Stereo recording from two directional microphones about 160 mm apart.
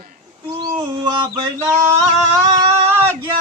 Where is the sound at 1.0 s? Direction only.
35° right (ahead or behind).